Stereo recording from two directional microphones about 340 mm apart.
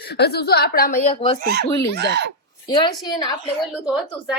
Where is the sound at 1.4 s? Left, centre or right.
Right.